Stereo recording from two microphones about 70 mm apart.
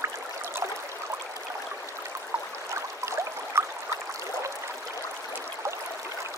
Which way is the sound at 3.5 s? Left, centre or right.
Right.